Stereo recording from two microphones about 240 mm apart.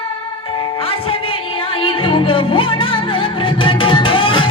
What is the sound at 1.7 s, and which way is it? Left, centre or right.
Music, left.